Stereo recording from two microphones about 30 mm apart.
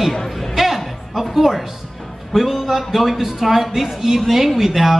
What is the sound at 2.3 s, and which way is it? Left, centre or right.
A man's voice, centre.